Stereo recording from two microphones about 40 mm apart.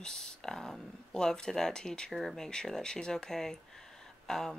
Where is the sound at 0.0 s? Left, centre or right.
Centre.